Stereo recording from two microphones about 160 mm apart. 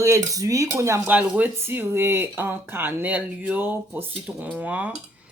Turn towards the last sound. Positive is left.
turn(degrees=-10)  # may be behind; listen again after turning